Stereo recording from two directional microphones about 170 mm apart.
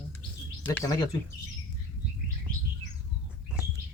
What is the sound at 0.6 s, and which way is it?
Speech, 10° left (ahead or behind).